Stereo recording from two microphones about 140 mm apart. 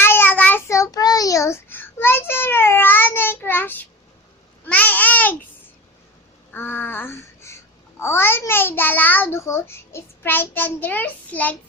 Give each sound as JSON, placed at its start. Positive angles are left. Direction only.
{"t": 0.0, "sound": "child singing", "side_deg": 15}
{"t": 4.6, "sound": "babbling", "side_deg": 10}
{"t": 6.5, "sound": "babbling", "side_deg": 15}